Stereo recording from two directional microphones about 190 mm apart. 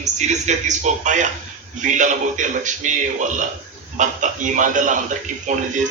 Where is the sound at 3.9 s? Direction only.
40° right (ahead or behind).